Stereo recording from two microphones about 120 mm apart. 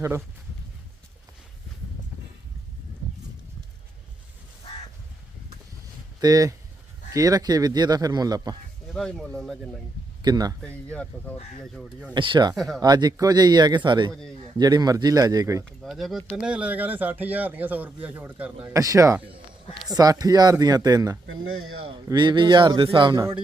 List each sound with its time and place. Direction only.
6.2 s speech: 30° right (ahead or behind)
9.0 s speech: 5° left (ahead or behind)
10.2 s speech: 35° right (ahead or behind)
10.6 s speech: 10° left (ahead or behind)
12.1 s speech: 40° right (ahead or behind)
12.5 s speech: centre (ahead or behind)
12.8 s speech: 35° right (ahead or behind)
14.1 s speech: 5° left (ahead or behind)
14.6 s speech: 35° right (ahead or behind)
15.8 s speech: centre (ahead or behind)
18.6 s speech: 30° right (ahead or behind)
21.8 s speech: 40° right (ahead or behind)